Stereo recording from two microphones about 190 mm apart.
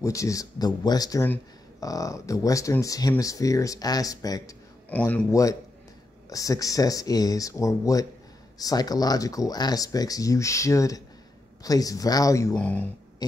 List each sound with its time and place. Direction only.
0.0 s a man's voice: 15° left (ahead or behind)
4.8 s a man's voice: 10° left (ahead or behind)